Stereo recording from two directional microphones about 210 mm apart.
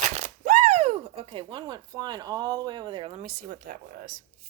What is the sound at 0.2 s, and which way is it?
Speech, 35° right (ahead or behind).